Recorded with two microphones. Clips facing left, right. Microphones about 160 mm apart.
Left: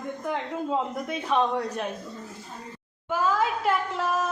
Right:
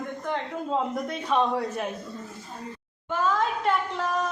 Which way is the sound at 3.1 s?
5° left (ahead or behind).